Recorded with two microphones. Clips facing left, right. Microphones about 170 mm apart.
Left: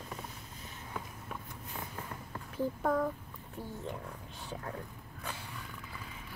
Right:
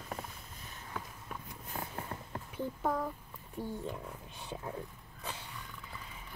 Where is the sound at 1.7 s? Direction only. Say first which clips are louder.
Right 3 dB; 40° right (ahead or behind).